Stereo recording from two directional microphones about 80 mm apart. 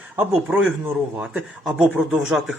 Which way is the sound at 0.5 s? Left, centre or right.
Centre.